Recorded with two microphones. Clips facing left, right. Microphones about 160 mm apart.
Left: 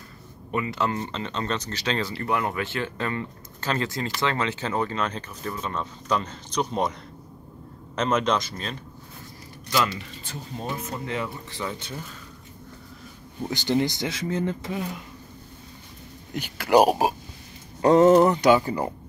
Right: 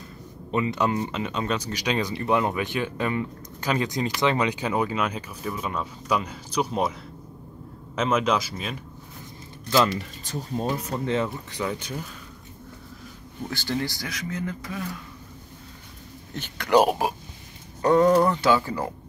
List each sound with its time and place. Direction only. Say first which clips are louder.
0.5 s speech: right 2 dB; 20° right (ahead or behind)
9.9 s speech: right 5 dB; 40° right (ahead or behind)
11.1 s speech: right 7 dB; 20° right (ahead or behind)
13.4 s speech: left 5 dB; 20° left (ahead or behind)
16.3 s speech: left 1 dB; 10° left (ahead or behind)
17.8 s speech: left 3 dB; 25° left (ahead or behind)